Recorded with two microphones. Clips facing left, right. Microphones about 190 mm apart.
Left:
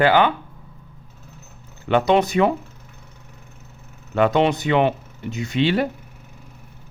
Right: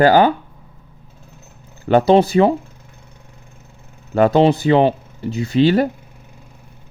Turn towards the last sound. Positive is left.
turn(degrees=-40)  # may be behind; listen again after turning